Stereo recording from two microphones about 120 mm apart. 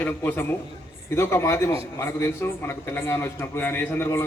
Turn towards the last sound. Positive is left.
turn(degrees=20)  # may be behind; listen again after turning